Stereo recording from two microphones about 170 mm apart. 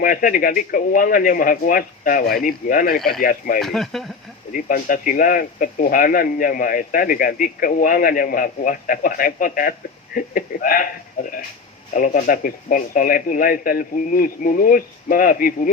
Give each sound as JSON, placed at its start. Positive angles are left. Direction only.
{"t": 0.0, "sound": "speech", "side_deg": 55}
{"t": 3.6, "sound": "speech", "side_deg": 0}
{"t": 4.5, "sound": "speech", "side_deg": 55}